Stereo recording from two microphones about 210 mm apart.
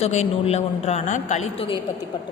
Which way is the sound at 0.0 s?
30° left (ahead or behind).